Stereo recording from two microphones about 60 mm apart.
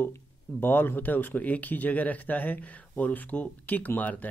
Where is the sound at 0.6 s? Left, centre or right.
Left.